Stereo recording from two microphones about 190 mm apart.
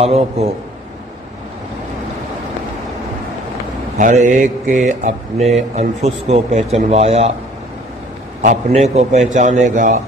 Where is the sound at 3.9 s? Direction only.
40° right (ahead or behind).